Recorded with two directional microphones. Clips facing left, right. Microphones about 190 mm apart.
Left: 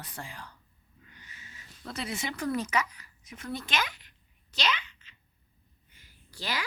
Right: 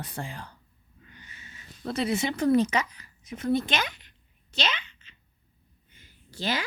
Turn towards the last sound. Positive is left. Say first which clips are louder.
# right 6 dB
turn(degrees=-25)  # may be behind; listen again after turning